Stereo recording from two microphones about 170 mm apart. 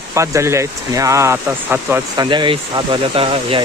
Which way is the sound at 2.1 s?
25° right (ahead or behind).